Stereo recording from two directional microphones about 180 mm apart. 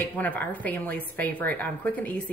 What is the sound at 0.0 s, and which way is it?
A woman's voice, 10° left (ahead or behind).